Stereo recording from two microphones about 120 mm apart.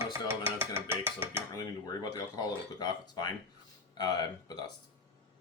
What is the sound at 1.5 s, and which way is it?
Speech, 30° left (ahead or behind).